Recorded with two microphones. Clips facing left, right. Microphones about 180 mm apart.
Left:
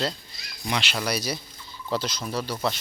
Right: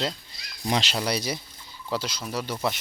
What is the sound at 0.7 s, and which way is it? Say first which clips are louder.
Speech: right 2 dB; 35° right (ahead or behind).